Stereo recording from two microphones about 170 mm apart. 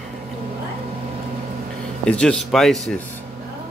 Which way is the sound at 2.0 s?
5° left (ahead or behind).